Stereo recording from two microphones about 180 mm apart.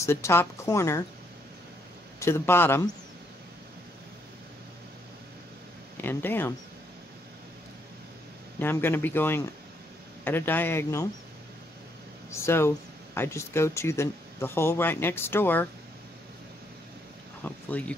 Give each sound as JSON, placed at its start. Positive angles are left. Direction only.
{"t": 0.0, "sound": "speech", "side_deg": 15}
{"t": 2.1, "sound": "speech", "side_deg": 15}
{"t": 5.9, "sound": "speech", "side_deg": 10}
{"t": 8.5, "sound": "speech", "side_deg": 10}
{"t": 12.3, "sound": "speech", "side_deg": 15}
{"t": 17.4, "sound": "speech", "side_deg": 10}